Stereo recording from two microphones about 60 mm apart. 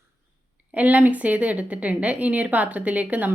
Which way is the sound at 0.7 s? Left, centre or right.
Right.